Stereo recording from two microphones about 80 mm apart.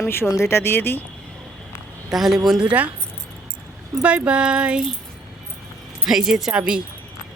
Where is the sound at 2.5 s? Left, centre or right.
Centre.